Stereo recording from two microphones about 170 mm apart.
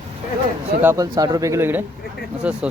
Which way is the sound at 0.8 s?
15° right (ahead or behind).